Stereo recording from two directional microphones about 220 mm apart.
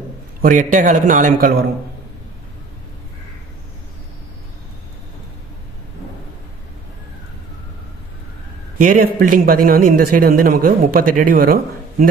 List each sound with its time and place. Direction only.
0.4 s speech: 35° right (ahead or behind)
8.7 s speech: 40° right (ahead or behind)